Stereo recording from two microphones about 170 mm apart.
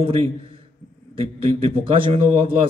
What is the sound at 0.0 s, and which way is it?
A man's voice, 35° right (ahead or behind).